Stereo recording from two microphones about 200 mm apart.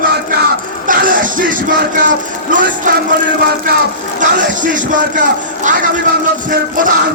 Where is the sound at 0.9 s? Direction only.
45° right (ahead or behind).